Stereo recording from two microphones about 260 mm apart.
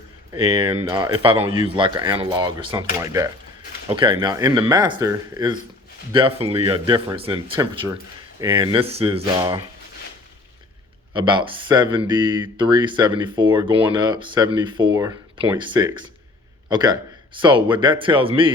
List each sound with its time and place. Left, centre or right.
0.3 s speech: right
11.1 s speech: centre